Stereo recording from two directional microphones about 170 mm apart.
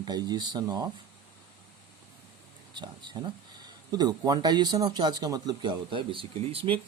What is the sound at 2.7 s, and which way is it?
Speech, 25° right (ahead or behind).